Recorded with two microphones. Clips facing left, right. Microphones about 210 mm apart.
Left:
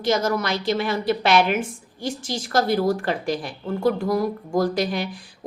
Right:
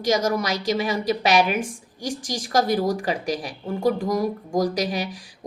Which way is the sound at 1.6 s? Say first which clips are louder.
Even; 45° right (ahead or behind).